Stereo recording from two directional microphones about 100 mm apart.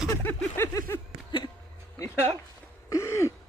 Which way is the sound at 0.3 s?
25° left (ahead or behind).